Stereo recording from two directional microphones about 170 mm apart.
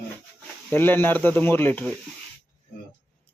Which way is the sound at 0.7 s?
10° left (ahead or behind).